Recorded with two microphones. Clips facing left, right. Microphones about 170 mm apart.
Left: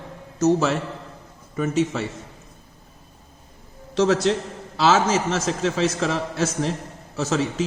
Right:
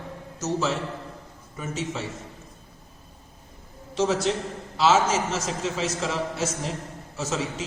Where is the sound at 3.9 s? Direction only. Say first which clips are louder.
Left 5 dB; 70° left (ahead or behind).